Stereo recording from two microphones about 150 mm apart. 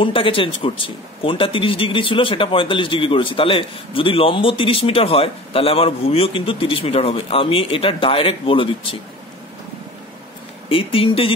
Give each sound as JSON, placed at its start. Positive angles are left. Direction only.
{"t": 0.0, "sound": "speech", "side_deg": 35}
{"t": 10.7, "sound": "speech", "side_deg": 35}